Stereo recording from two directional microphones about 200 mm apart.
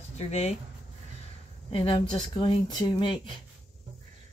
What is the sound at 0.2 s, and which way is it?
Speech, 30° left (ahead or behind).